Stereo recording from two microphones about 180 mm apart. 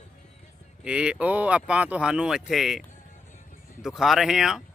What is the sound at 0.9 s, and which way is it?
Speech, 5° right (ahead or behind).